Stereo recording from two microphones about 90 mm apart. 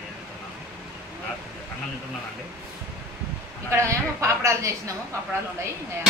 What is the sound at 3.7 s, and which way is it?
A woman's voice, 30° right (ahead or behind).